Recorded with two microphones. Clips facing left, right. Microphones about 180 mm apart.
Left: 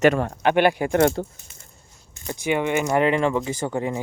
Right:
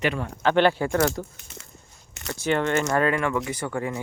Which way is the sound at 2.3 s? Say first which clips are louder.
Left 1 dB; 15° left (ahead or behind).